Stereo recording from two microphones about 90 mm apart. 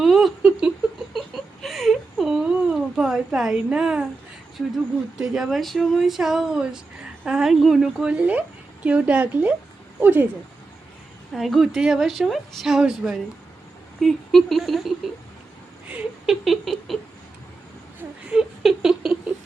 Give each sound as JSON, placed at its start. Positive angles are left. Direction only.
{"t": 0.0, "sound": "laughter", "side_deg": -5}
{"t": 1.6, "sound": "a sound", "side_deg": 0}
{"t": 5.1, "sound": "a woman's voice", "side_deg": -5}
{"t": 11.3, "sound": "a woman's voice", "side_deg": 0}
{"t": 16.2, "sound": "a woman's voice", "side_deg": 0}
{"t": 18.3, "sound": "a sound", "side_deg": -5}